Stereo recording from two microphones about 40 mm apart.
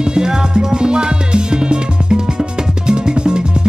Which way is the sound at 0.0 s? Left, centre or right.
Centre.